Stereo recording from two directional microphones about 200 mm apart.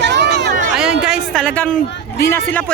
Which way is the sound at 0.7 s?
5° right (ahead or behind).